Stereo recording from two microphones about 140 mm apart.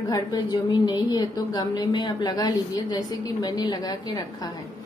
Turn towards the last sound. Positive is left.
turn(degrees=30)  # may be behind; listen again after turning